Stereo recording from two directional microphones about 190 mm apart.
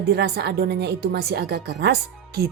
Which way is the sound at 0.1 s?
60° right (ahead or behind).